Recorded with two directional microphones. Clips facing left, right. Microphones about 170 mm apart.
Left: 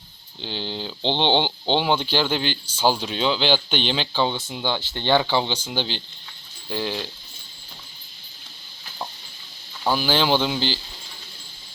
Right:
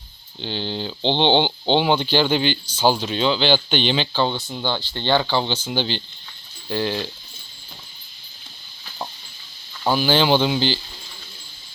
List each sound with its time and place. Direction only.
0.4 s speech: 5° left (ahead or behind)
4.9 s speech: 15° left (ahead or behind)
10.0 s speech: centre (ahead or behind)